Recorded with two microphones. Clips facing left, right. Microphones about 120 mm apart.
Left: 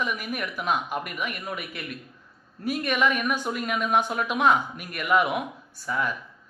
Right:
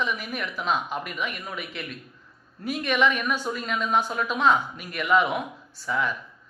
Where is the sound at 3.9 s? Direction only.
55° left (ahead or behind).